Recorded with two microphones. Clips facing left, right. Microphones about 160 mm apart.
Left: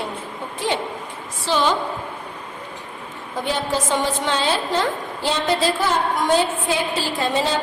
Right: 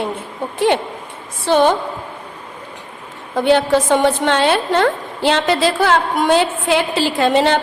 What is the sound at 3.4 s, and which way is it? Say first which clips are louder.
A woman's voice: right 10 dB; 65° right (ahead or behind).